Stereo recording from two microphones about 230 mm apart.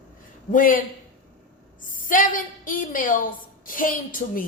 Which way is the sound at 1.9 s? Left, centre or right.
Left.